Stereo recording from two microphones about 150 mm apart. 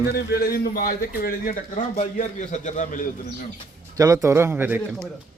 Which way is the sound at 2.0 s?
50° left (ahead or behind).